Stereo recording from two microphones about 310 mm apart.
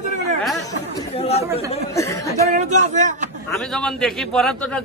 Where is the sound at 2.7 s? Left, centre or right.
Right.